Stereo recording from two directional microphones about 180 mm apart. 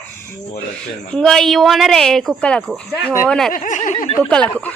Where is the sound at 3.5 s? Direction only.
45° left (ahead or behind).